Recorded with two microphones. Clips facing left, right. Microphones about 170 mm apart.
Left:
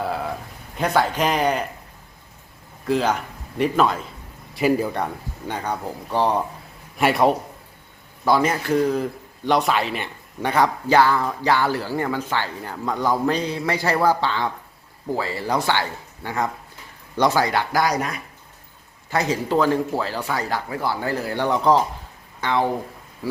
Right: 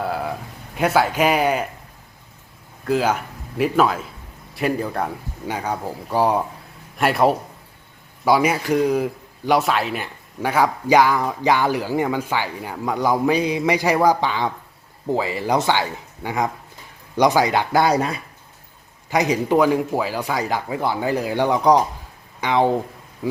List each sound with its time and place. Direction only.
0.0 s a sound: centre (ahead or behind)
0.8 s speech: 5° right (ahead or behind)
2.8 s a man's voice: 5° right (ahead or behind); by 18.2 s 30° right (ahead or behind)
19.1 s speech: 15° right (ahead or behind)